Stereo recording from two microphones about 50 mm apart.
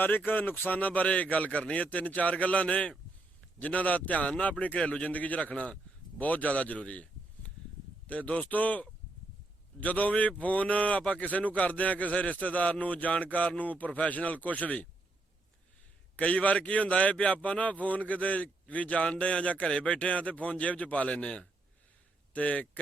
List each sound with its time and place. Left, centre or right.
0.3 s a man's voice: left
16.1 s a man's voice: left